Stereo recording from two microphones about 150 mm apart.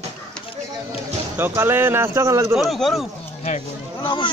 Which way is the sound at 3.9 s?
30° left (ahead or behind).